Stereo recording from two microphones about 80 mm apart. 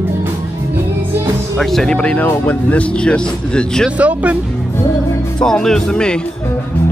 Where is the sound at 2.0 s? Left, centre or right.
Centre.